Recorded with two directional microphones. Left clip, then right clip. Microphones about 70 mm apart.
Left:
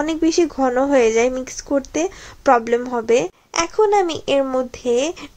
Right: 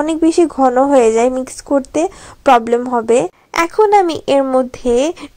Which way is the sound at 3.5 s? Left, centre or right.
Right.